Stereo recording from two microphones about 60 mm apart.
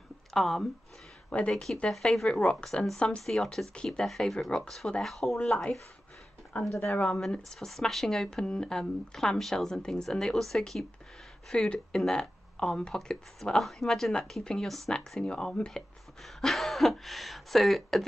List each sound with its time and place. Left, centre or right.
0.3 s speech: centre
3.3 s speech: centre
4.0 s speech: centre
6.5 s speech: left
7.1 s speech: centre